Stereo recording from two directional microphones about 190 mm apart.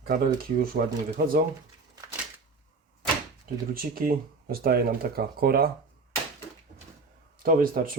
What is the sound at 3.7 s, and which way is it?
Speech, 50° right (ahead or behind).